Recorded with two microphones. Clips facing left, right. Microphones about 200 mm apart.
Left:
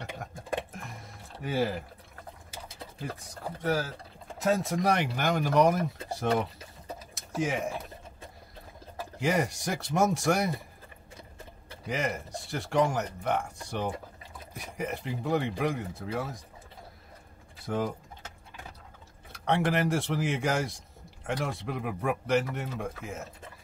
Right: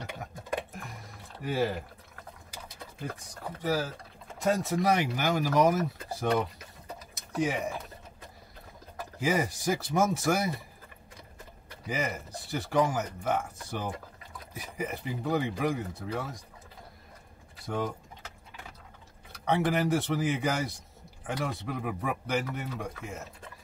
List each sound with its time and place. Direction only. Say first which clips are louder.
1.4 s speech: even; centre (ahead or behind)
2.5 s a sound: left 2 dB; 30° left (ahead or behind)
4.4 s speech: even; centre (ahead or behind)
7.2 s typing: right 1 dB; centre (ahead or behind)
9.2 s speech: even; centre (ahead or behind)
11.8 s speech: left 1 dB; centre (ahead or behind)
19.3 s speech: even; centre (ahead or behind)